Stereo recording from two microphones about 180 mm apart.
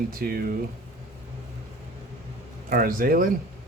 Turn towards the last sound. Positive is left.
turn(degrees=-50)  # may be behind; listen again after turning